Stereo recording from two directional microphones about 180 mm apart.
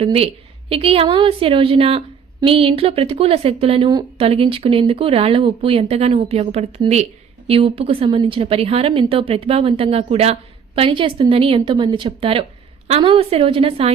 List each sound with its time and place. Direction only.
0.0 s a woman's voice: 30° right (ahead or behind)